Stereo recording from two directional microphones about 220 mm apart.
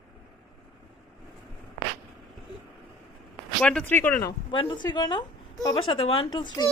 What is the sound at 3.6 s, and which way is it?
Speech, 5° left (ahead or behind).